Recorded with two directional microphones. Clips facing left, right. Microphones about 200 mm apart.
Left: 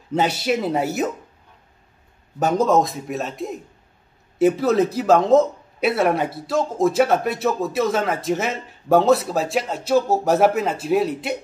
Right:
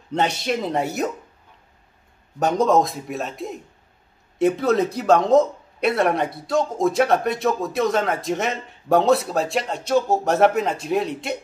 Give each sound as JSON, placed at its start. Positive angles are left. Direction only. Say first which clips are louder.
{"t": 0.1, "sound": "speech", "louder": "left 2 dB", "side_deg": 5}
{"t": 2.3, "sound": "speech", "louder": "even", "side_deg": 0}